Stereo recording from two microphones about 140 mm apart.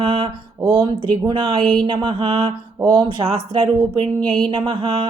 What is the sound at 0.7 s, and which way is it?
Music, 35° right (ahead or behind).